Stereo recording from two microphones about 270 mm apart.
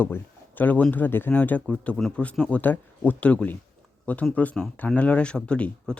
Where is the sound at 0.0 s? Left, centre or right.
Centre.